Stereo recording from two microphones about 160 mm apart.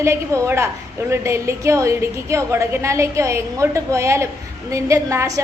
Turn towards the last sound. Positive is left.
turn(degrees=-20)  # may be behind; listen again after turning